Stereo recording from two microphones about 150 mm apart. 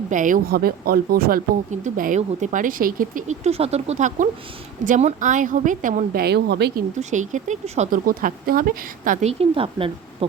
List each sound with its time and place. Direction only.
0.1 s speech: 60° right (ahead or behind); by 1.4 s 80° right
1.7 s speech: 60° right (ahead or behind); by 6.8 s 90° right
7.0 s speech: 55° right (ahead or behind); by 9.1 s 70° right (ahead or behind)
9.2 s speech: 40° right (ahead or behind)